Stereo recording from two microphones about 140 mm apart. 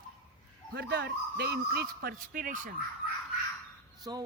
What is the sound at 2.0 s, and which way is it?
Speech, 90° right.